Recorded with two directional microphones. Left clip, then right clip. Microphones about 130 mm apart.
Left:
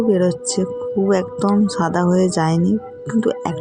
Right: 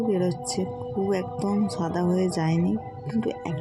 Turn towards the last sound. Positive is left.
turn(degrees=35)  # may be behind; listen again after turning